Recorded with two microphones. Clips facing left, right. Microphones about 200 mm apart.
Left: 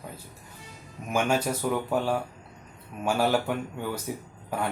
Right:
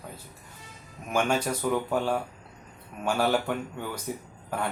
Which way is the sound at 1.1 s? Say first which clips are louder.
Left 1 dB; 5° left (ahead or behind).